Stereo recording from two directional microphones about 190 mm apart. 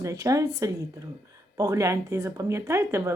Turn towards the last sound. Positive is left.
turn(degrees=-15)  # may be behind; listen again after turning